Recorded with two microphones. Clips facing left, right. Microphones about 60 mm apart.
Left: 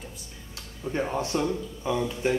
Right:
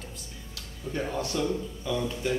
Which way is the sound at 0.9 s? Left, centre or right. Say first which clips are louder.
Left 3 dB; left.